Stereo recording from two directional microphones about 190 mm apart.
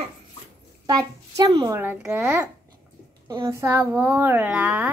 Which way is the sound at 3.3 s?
20° right (ahead or behind).